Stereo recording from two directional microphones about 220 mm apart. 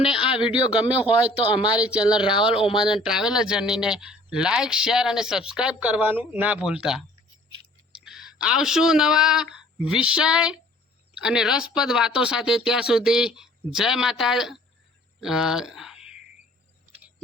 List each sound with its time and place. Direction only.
0.5 s speech: 5° right (ahead or behind)
2.2 s speech: 20° left (ahead or behind)
3.0 s speech: 5° right (ahead or behind)
8.0 s a woman's voice: centre (ahead or behind)